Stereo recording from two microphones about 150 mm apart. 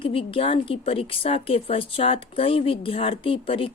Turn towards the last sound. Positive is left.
turn(degrees=35)  # may be behind; listen again after turning